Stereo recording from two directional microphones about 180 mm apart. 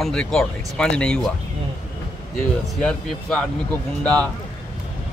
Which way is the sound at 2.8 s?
5° left (ahead or behind).